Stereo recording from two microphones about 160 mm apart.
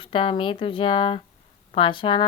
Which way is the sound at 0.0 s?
30° left (ahead or behind).